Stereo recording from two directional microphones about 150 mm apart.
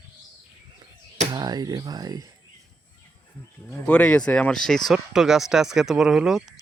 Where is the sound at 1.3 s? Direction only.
25° right (ahead or behind).